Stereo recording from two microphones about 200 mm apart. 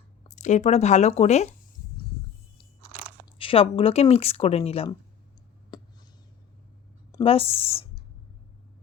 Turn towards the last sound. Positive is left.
turn(degrees=25)  # may be behind; listen again after turning